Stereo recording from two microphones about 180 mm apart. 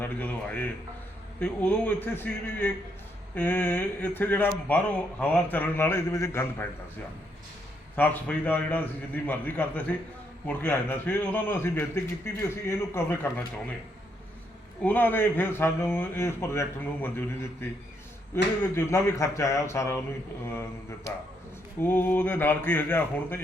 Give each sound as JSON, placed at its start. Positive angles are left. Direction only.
{"t": 0.0, "sound": "a man's voice", "side_deg": 10}
{"t": 7.9, "sound": "a man's voice", "side_deg": 10}
{"t": 14.8, "sound": "a man's voice", "side_deg": 10}